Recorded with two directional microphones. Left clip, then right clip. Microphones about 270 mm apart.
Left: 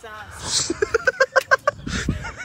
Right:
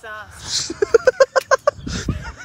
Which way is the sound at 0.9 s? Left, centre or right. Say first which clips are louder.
Right 5 dB; right.